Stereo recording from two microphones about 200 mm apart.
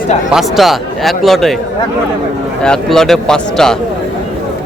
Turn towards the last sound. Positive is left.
turn(degrees=5)  # may be behind; listen again after turning